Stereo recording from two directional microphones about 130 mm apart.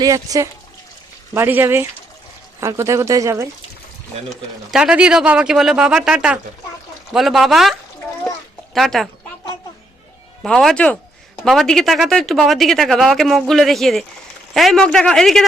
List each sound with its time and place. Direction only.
0.0 s speech: 25° right (ahead or behind)
4.7 s speech: 5° right (ahead or behind)
10.4 s speech: centre (ahead or behind)